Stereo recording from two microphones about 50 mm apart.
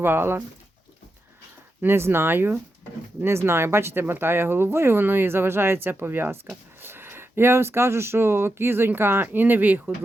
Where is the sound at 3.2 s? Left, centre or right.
Right.